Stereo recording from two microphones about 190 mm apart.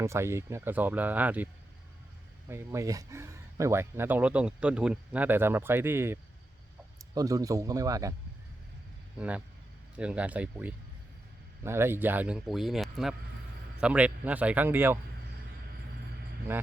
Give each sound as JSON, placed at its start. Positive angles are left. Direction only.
{"t": 0.0, "sound": "speech", "side_deg": -15}
{"t": 2.5, "sound": "speech", "side_deg": -15}
{"t": 9.1, "sound": "speech", "side_deg": -5}